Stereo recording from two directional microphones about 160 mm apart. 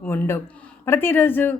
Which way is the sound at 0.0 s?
10° left (ahead or behind).